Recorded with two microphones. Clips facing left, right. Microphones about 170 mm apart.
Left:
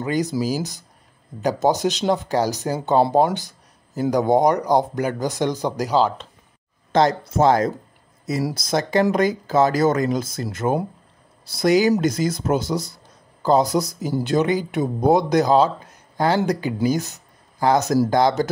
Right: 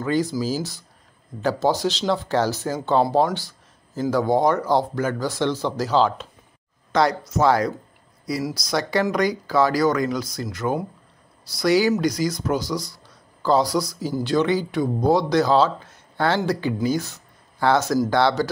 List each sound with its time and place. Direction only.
0.0 s speech: 20° left (ahead or behind)
6.9 s speech: 25° left (ahead or behind)
8.6 s speech: 20° left (ahead or behind)
12.1 s speech: 50° left (ahead or behind)
12.4 s speech: 25° left (ahead or behind)
16.8 s speech: 20° left (ahead or behind)
17.6 s speech: 40° left (ahead or behind)